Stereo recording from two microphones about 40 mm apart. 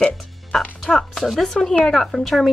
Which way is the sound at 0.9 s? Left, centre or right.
Centre.